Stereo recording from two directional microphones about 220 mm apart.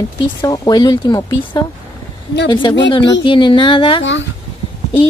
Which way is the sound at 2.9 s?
20° left (ahead or behind).